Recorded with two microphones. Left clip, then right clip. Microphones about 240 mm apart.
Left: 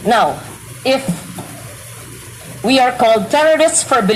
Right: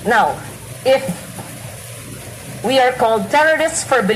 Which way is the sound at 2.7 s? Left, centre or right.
Left.